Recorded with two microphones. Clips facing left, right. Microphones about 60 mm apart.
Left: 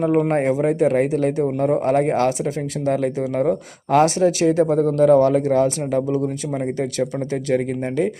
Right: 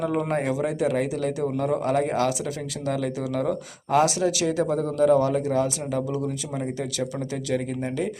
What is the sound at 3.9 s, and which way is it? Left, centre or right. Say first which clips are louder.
A man's voice: left 5 dB; left.